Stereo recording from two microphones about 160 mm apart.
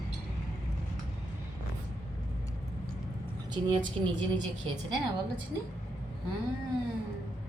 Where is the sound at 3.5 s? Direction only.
30° right (ahead or behind).